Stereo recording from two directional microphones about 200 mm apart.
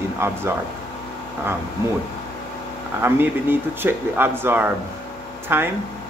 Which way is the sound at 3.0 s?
10° right (ahead or behind).